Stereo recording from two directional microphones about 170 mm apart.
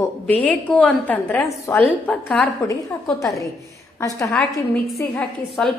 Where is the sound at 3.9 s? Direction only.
15° left (ahead or behind).